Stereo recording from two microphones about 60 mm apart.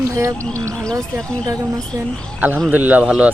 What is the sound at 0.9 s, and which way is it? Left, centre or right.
Speech, right.